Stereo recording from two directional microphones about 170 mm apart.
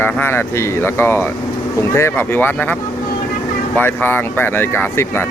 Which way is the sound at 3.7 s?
10° left (ahead or behind).